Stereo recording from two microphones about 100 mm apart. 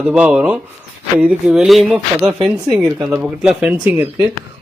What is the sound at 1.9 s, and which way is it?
Speech, 15° right (ahead or behind).